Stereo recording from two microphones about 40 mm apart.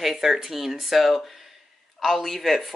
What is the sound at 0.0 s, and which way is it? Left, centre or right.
Speech, centre.